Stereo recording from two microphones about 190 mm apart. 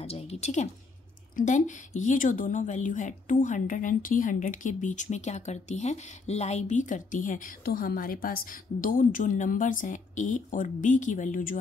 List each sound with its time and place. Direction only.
0.0 s a woman's voice: 35° left (ahead or behind)